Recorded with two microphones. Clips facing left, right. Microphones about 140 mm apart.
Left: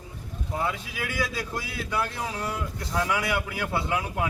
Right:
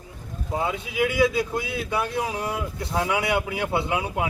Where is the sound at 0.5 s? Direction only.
20° right (ahead or behind).